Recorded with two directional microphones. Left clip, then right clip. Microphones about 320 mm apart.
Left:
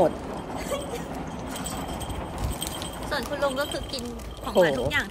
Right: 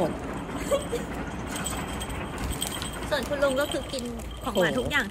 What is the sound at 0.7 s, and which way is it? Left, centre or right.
Speech, centre.